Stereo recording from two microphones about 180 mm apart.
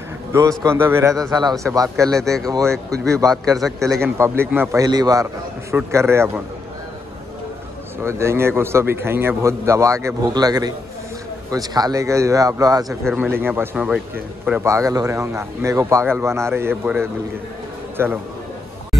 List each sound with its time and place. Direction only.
0.3 s a man's voice: 15° right (ahead or behind)
2.1 s speech: centre (ahead or behind)
3.1 s a man's voice: 20° right (ahead or behind)
3.5 s speech: centre (ahead or behind)
4.0 s a man's voice: 15° right (ahead or behind)
8.0 s a man's voice: 15° right (ahead or behind)
12.8 s speech: centre (ahead or behind)
14.6 s a man's voice: 15° right (ahead or behind)